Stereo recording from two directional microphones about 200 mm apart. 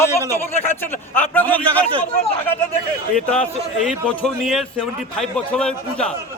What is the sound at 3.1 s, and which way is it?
A man's voice, 5° left (ahead or behind).